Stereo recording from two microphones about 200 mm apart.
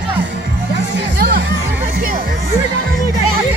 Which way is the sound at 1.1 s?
50° right (ahead or behind).